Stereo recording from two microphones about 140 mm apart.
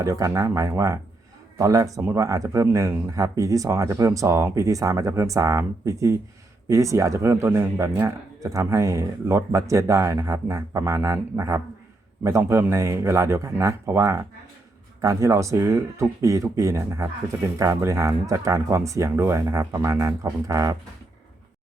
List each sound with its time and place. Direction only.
0.0 s a man's voice: 25° right (ahead or behind)